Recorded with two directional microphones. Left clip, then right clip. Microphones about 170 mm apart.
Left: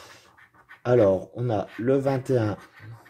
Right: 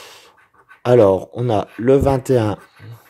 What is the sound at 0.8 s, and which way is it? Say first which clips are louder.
Speech: right 8 dB; 30° right (ahead or behind).